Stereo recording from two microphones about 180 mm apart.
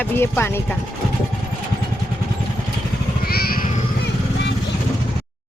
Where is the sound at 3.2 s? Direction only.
55° left (ahead or behind).